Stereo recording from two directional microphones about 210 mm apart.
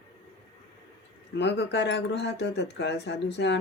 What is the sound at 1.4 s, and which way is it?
Speech, 55° left (ahead or behind).